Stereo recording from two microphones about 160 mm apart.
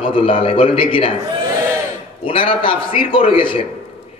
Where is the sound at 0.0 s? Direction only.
35° left (ahead or behind).